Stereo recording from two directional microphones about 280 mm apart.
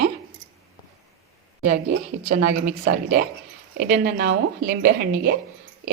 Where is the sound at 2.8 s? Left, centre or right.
Right.